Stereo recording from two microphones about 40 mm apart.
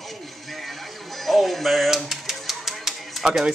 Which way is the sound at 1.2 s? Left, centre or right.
Centre.